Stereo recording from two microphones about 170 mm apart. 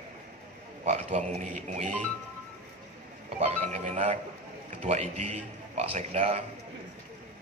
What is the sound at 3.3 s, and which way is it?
A man's voice, 45° right (ahead or behind).